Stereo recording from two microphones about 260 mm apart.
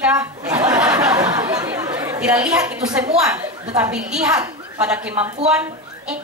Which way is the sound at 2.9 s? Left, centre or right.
Centre.